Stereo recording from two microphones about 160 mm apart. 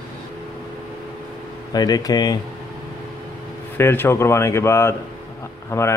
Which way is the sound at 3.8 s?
15° left (ahead or behind).